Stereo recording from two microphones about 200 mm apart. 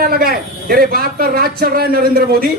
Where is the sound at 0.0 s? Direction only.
50° right (ahead or behind).